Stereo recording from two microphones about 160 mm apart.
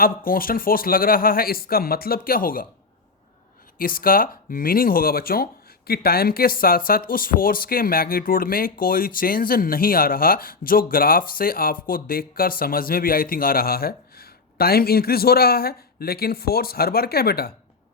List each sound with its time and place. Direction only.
0.3 s speech: 65° left (ahead or behind)
3.8 s speech: 65° left (ahead or behind)